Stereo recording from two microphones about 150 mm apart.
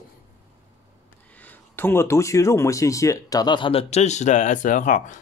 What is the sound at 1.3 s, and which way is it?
Speech, 10° left (ahead or behind).